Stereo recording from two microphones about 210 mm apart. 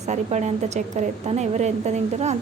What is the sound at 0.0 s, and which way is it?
Speech, 35° right (ahead or behind).